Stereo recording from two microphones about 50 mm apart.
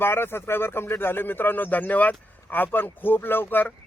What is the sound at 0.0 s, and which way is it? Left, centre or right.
A man's voice, left.